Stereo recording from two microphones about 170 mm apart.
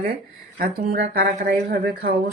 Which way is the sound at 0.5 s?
60° right (ahead or behind).